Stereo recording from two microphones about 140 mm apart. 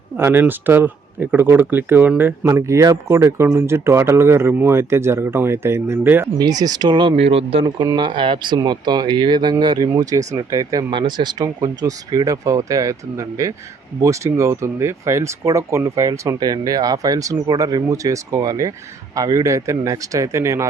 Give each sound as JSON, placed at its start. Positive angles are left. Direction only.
{"t": 0.2, "sound": "speech", "side_deg": -15}
{"t": 6.4, "sound": "speech", "side_deg": -30}
{"t": 7.2, "sound": "speech", "side_deg": -45}